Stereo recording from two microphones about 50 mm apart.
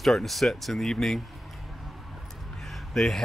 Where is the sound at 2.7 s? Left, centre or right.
Centre.